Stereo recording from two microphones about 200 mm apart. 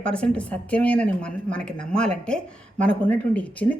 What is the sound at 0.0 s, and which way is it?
Speech, 5° left (ahead or behind).